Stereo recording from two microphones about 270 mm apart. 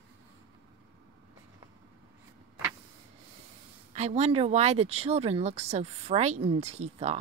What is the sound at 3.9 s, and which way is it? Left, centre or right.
Speech, right.